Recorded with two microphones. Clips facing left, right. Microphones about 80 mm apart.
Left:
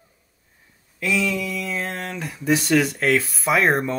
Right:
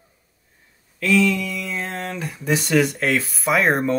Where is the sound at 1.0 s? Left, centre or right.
Centre.